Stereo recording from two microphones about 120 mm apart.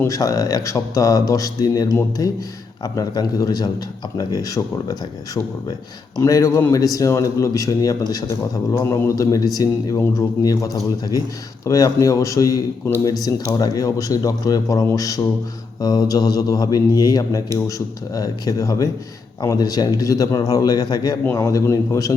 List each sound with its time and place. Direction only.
0.0 s a man's voice: 30° left (ahead or behind)